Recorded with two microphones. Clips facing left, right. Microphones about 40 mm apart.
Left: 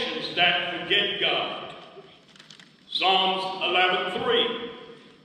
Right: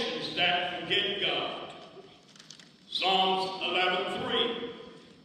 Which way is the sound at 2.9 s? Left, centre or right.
Left.